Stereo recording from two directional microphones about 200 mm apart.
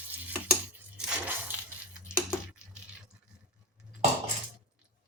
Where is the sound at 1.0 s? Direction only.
10° right (ahead or behind).